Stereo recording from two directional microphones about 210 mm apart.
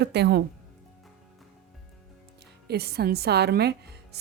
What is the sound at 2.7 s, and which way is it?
A woman's voice, 50° right (ahead or behind).